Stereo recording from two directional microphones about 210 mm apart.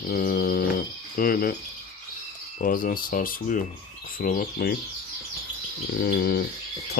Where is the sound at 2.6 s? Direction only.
40° left (ahead or behind).